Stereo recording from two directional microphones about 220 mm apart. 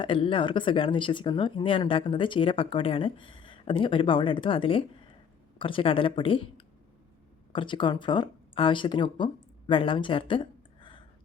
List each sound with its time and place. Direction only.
0.0 s speech: 25° left (ahead or behind)